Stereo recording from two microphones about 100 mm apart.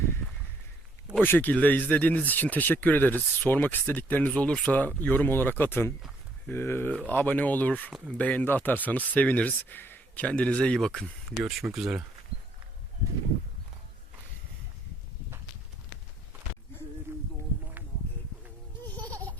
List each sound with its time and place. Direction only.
1.2 s speech: 20° left (ahead or behind); by 12.0 s 5° right (ahead or behind)
17.1 s a sound: 25° right (ahead or behind)
18.9 s baby laughter: 15° left (ahead or behind)